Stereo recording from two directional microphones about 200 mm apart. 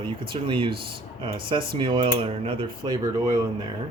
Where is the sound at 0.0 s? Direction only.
25° right (ahead or behind).